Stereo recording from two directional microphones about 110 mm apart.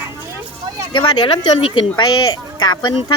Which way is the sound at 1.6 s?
60° left (ahead or behind).